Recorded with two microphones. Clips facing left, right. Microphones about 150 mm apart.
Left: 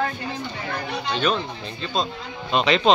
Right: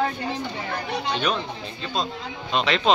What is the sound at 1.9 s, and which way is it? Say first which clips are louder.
Speech: left 2 dB; centre (ahead or behind).